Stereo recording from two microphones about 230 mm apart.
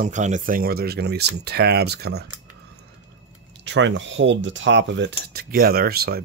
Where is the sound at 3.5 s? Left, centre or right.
Right.